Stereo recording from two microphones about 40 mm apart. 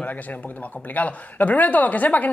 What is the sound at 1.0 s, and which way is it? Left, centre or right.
Speech, left.